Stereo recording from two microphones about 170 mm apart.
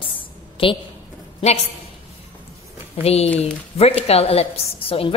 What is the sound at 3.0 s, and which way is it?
A woman's voice, 35° left (ahead or behind).